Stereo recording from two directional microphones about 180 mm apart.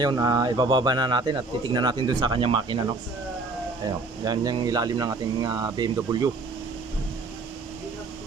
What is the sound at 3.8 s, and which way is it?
A man's voice, 20° right (ahead or behind).